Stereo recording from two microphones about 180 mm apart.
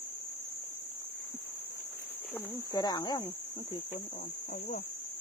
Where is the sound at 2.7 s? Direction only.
25° left (ahead or behind).